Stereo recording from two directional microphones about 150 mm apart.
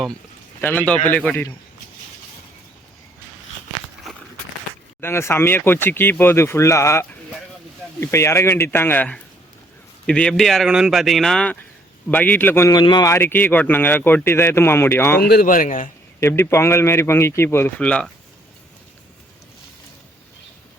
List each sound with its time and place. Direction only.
0.6 s speech: 10° left (ahead or behind)
4.9 s speech: 15° left (ahead or behind)
12.7 s speech: 30° left (ahead or behind)
15.2 s speech: 90° left; by 15.9 s 60° left (ahead or behind)
16.2 s speech: 15° left (ahead or behind)